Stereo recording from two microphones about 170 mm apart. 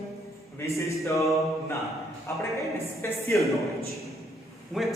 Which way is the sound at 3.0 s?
15° left (ahead or behind).